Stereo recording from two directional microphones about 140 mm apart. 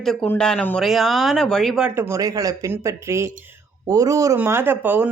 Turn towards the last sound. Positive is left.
turn(degrees=-15)  # may be behind; listen again after turning